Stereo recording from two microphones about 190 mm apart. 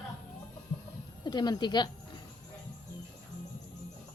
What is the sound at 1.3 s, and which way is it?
Speech, 20° left (ahead or behind).